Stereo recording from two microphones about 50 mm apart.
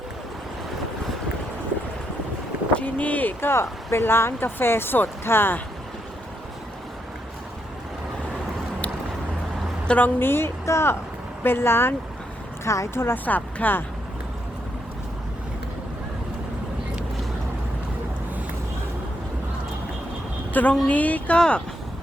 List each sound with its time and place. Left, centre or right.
2.7 s speech: left
3.4 s speech: left
10.0 s speech: left
10.7 s speech: left
11.4 s speech: left
12.6 s a woman's voice: left
12.9 s speech: left
13.2 s speech: left
20.5 s a woman's voice: left
21.3 s speech: centre